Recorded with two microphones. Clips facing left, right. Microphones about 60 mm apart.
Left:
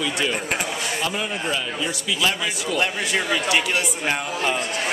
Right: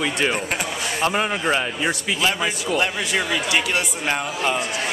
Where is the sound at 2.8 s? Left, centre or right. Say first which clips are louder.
Left 1 dB; centre.